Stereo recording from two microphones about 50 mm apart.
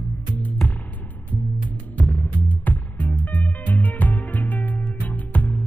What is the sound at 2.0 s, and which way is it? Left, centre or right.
Music, left.